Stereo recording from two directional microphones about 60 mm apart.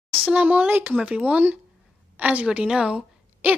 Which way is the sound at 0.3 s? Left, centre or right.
Right.